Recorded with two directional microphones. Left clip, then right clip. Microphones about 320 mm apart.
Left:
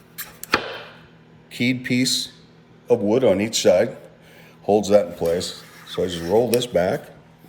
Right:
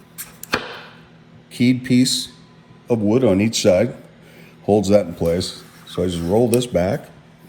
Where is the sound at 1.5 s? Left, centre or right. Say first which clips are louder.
Right 4 dB; centre.